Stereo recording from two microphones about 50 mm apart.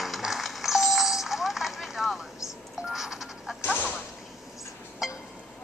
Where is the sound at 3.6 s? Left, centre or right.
Left.